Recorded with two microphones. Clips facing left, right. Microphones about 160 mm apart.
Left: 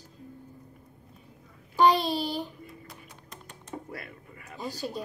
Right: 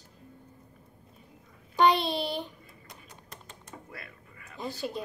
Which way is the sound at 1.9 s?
35° left (ahead or behind).